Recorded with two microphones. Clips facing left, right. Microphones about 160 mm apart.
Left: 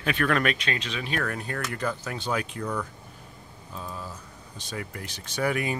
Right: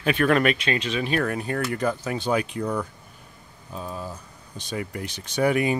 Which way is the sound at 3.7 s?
20° right (ahead or behind).